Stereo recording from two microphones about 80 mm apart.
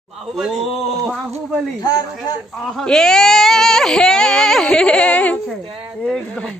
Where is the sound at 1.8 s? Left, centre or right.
Left.